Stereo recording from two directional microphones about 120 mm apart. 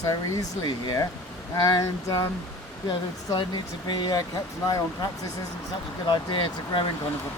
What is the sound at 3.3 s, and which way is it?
Speech, 40° left (ahead or behind).